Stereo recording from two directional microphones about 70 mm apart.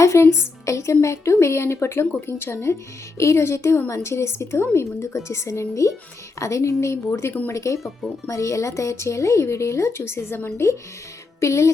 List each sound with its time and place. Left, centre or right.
0.0 s a woman's voice: left
7.5 s speech: left